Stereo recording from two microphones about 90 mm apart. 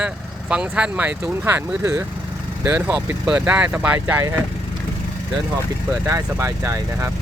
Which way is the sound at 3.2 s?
15° right (ahead or behind).